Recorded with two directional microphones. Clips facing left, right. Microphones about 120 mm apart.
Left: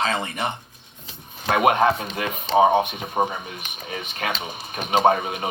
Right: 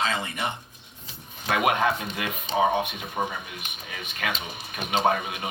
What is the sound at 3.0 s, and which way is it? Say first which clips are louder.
Speech: left 6 dB; 45° left (ahead or behind).